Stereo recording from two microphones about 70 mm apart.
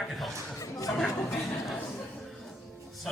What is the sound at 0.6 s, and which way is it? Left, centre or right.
Speech, left.